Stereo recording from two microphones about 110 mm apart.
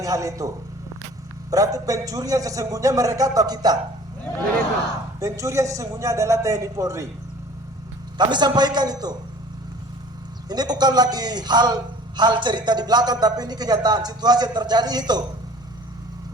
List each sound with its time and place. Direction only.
0.0 s a man's voice: 30° right (ahead or behind)
5.2 s a man's voice: 30° right (ahead or behind)
8.2 s a man's voice: 40° right (ahead or behind)
10.5 s a man's voice: 40° right (ahead or behind)